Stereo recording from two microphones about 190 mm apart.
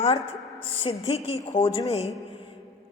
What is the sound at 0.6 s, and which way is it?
A man's voice, 30° left (ahead or behind).